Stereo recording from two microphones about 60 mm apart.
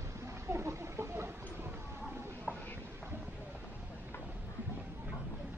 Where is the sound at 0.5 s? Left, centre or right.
Right.